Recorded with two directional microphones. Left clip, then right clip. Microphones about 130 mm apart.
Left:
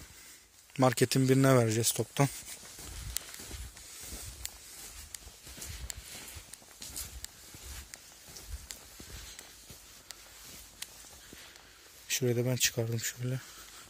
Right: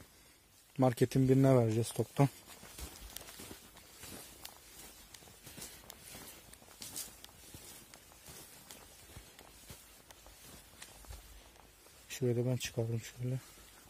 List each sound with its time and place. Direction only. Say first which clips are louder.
0.7 s speech: left 4 dB; 5° right (ahead or behind)
3.2 s walk: left 10 dB; 35° right (ahead or behind)
12.1 s speech: left 4 dB; 5° right (ahead or behind)